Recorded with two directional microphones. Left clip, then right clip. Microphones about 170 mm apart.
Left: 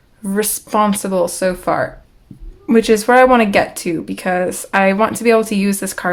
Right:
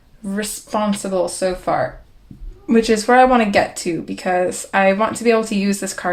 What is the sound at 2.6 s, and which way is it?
Speech, 30° left (ahead or behind).